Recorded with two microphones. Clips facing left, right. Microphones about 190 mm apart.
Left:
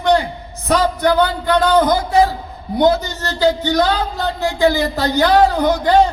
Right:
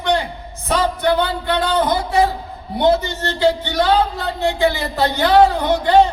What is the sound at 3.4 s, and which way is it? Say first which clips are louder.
Speech: left 2 dB; 40° left (ahead or behind).